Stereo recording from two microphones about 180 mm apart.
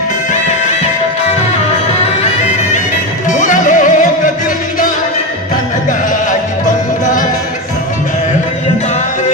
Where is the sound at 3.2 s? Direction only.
45° left (ahead or behind).